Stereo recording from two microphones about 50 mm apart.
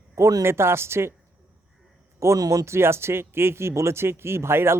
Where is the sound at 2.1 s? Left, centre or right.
Right.